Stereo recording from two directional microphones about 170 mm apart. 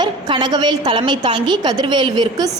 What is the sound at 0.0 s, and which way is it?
A woman's voice, 25° right (ahead or behind).